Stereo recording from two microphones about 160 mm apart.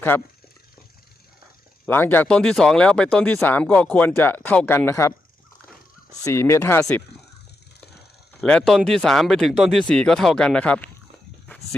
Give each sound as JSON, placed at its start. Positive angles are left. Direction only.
{"t": 0.1, "sound": "speech", "side_deg": 15}
{"t": 1.9, "sound": "speech", "side_deg": 15}
{"t": 6.2, "sound": "speech", "side_deg": 15}
{"t": 8.4, "sound": "speech", "side_deg": 5}